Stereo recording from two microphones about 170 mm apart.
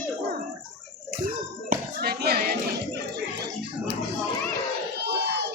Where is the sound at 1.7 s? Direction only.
65° right (ahead or behind).